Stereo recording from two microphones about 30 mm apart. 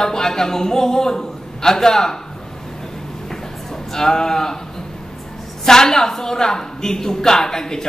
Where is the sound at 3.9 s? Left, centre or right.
Centre.